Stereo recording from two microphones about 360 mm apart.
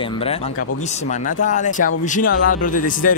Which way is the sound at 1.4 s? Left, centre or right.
Left.